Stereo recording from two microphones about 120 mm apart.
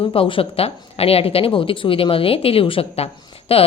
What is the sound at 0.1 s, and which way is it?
A woman's voice, 50° left (ahead or behind).